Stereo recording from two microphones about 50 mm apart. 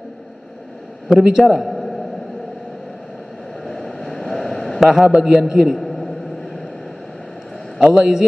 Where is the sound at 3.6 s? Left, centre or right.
Centre.